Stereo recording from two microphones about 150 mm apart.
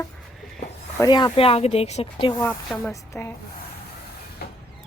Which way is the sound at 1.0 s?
25° left (ahead or behind).